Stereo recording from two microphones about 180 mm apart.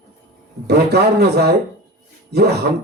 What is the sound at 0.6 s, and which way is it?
Speech, 65° right (ahead or behind).